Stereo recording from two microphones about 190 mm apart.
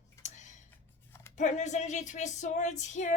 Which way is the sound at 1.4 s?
40° left (ahead or behind).